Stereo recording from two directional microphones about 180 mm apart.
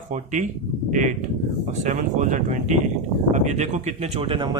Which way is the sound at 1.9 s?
45° right (ahead or behind).